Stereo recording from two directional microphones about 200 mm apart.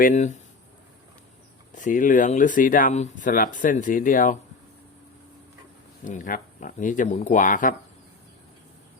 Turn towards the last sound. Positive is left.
turn(degrees=40)  # may be behind; listen again after turning